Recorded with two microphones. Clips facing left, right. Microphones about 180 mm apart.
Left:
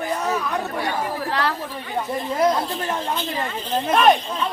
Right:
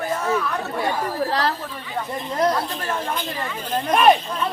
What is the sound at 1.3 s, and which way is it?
Speech, 35° right (ahead or behind).